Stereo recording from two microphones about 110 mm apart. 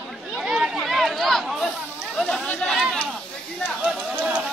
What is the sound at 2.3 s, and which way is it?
Chatter, centre (ahead or behind).